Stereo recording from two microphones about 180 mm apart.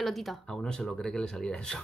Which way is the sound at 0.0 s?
Centre (ahead or behind).